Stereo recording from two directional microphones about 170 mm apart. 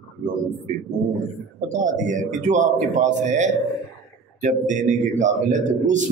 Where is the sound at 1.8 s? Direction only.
45° right (ahead or behind).